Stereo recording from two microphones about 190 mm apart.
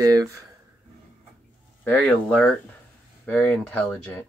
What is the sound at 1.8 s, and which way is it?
Speech, 5° left (ahead or behind).